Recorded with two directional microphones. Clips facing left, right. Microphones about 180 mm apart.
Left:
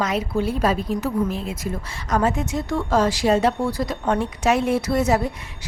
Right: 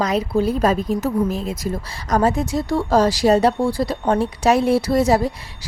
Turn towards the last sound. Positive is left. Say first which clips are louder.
# right 3 dB
turn(degrees=-35)  # may be behind; listen again after turning